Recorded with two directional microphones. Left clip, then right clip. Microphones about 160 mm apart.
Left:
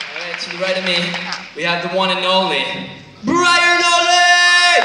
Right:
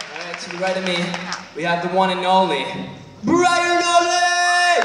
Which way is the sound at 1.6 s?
65° right (ahead or behind).